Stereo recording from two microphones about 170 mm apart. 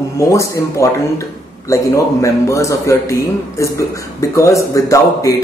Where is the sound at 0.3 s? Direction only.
20° left (ahead or behind).